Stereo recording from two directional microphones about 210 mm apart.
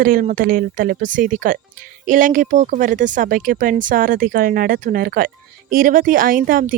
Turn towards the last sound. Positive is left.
turn(degrees=-40)  # may be behind; listen again after turning